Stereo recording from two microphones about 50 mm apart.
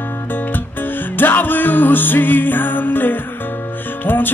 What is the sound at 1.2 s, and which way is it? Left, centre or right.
Music, left.